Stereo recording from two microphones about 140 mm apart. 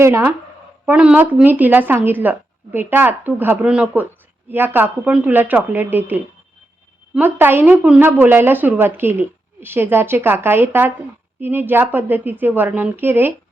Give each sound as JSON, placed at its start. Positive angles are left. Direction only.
{"t": 0.0, "sound": "speech", "side_deg": -15}